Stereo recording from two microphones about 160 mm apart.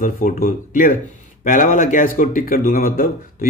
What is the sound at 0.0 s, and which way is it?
Speech, 55° left (ahead or behind).